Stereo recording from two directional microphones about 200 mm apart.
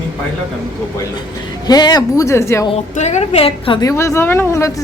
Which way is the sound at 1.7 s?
20° left (ahead or behind).